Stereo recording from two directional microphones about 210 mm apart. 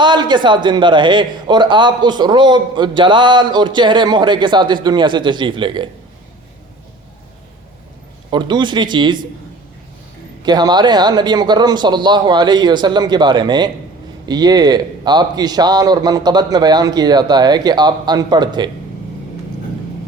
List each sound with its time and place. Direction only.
0.0 s a man's voice: 20° right (ahead or behind)
8.3 s a man's voice: 20° right (ahead or behind)
10.4 s a man's voice: 20° right (ahead or behind)